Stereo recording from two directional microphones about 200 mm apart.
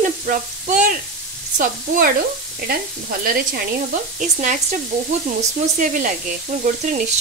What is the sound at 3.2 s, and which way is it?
Frying, 45° right (ahead or behind).